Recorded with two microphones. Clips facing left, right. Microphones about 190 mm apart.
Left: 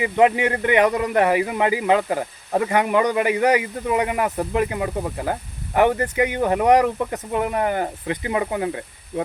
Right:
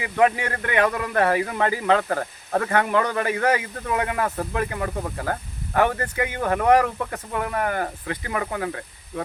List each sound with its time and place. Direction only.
0.0 s speech: 20° left (ahead or behind)